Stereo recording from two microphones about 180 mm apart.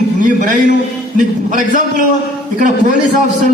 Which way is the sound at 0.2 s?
45° right (ahead or behind).